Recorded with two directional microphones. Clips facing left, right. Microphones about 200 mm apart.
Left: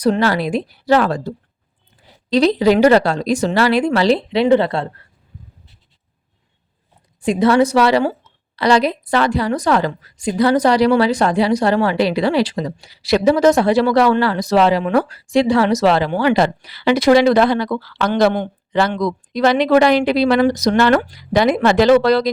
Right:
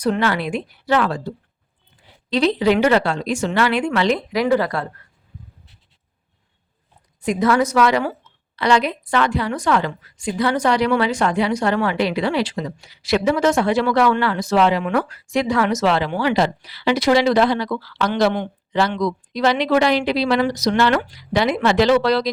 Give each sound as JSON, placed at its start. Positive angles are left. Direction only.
{"t": 0.0, "sound": "a woman's voice", "side_deg": 35}
{"t": 7.2, "sound": "a woman's voice", "side_deg": 30}